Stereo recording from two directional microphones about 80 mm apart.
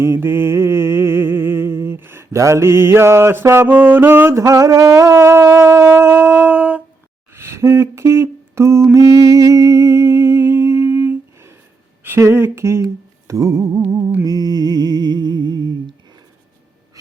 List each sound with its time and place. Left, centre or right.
0.0 s mantra: right
4.4 s music: right; by 6.8 s centre
7.3 s humming: right
12.0 s speech: right
13.2 s music: right
14.3 s music: right